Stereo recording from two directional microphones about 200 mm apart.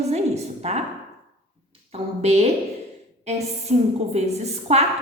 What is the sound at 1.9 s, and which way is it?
A woman's voice, 30° right (ahead or behind).